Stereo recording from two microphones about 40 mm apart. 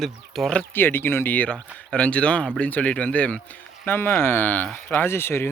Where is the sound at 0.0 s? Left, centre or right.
Centre.